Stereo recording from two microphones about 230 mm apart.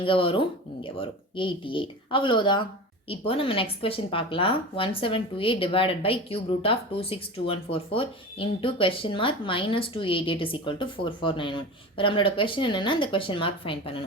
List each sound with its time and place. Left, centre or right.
0.0 s a woman's voice: left